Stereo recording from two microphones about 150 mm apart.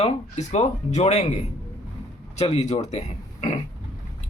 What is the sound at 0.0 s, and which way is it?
Speech, 50° left (ahead or behind).